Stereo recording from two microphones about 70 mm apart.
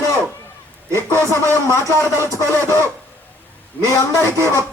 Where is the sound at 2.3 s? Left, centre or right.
Right.